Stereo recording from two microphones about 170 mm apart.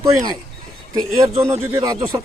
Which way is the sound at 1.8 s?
25° right (ahead or behind).